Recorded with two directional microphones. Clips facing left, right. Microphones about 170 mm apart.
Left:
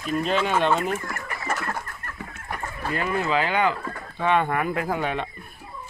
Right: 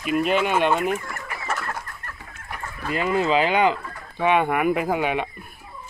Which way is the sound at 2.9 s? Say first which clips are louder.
Right 4 dB; 20° right (ahead or behind).